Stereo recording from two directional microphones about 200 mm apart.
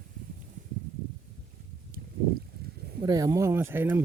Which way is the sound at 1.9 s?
45° right (ahead or behind).